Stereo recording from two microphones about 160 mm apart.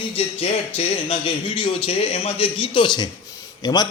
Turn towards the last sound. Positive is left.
turn(degrees=25)  # may be behind; listen again after turning